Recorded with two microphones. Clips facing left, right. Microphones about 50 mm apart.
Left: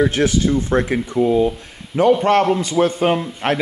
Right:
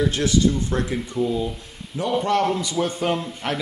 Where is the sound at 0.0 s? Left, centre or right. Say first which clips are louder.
Left 3 dB; left.